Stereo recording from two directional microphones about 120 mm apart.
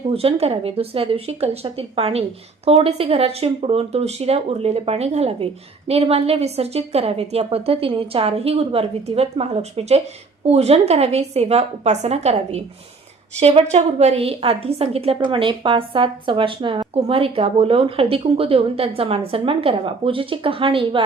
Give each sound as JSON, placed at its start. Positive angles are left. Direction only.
{"t": 0.1, "sound": "a woman's voice", "side_deg": -55}
{"t": 13.7, "sound": "a woman's voice", "side_deg": -65}